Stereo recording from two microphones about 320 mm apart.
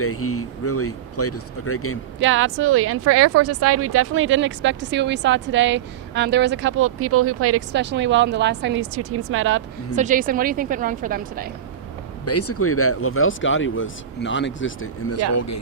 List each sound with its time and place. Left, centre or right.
0.0 s speech: left
2.1 s speech: right
9.9 s a woman's voice: right
12.2 s speech: left
15.3 s speech: left